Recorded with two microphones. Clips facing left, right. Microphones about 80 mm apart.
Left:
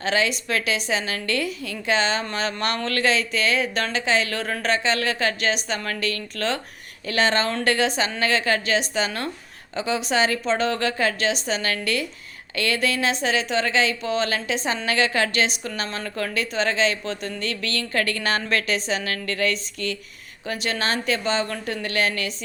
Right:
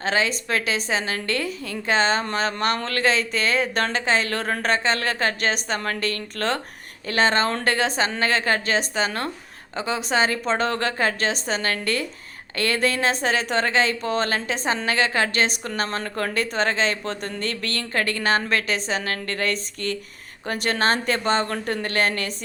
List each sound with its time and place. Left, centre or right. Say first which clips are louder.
0.0 s speech: even; right